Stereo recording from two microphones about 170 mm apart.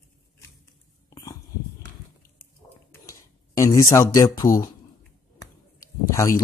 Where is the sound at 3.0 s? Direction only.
20° left (ahead or behind).